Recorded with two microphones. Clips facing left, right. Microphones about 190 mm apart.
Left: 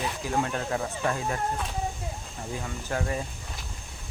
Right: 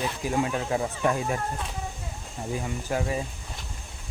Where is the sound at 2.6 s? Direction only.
10° right (ahead or behind).